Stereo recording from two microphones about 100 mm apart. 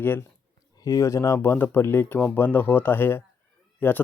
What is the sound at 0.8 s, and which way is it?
A man's voice, 35° left (ahead or behind).